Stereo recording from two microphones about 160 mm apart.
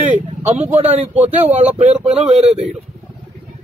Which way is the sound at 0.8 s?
10° right (ahead or behind).